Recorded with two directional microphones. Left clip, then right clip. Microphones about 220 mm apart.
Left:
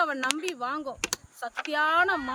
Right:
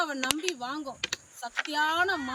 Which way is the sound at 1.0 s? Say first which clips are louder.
Even; 50° left (ahead or behind).